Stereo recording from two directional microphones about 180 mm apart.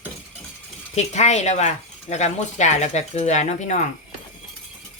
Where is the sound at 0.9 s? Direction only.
40° left (ahead or behind).